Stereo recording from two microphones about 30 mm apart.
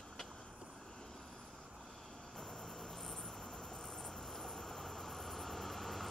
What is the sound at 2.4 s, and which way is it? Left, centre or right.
Cricket, centre.